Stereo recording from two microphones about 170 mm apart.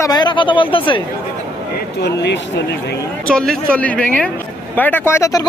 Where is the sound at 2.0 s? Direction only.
85° left.